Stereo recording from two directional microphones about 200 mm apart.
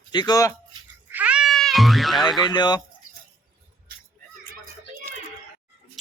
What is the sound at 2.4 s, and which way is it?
Speech, 20° left (ahead or behind).